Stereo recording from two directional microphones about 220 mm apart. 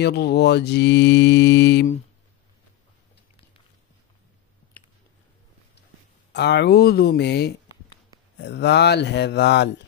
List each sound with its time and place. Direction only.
0.0 s mantra: 50° left (ahead or behind)
6.3 s mantra: 50° left (ahead or behind)